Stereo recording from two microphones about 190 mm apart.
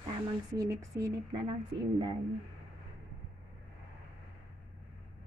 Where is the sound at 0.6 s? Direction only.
15° right (ahead or behind).